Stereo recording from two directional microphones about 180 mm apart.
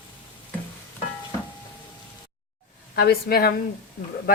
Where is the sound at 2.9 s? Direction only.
60° left (ahead or behind).